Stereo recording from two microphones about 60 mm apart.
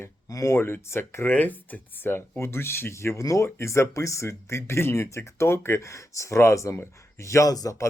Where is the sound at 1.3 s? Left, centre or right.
Left.